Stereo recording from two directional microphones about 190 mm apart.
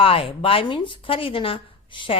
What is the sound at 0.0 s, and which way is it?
A woman's voice, 30° left (ahead or behind).